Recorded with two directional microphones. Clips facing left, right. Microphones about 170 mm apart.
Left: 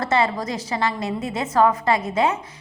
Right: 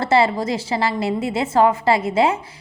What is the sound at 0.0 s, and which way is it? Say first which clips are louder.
A woman's voice: right 4 dB; 30° right (ahead or behind).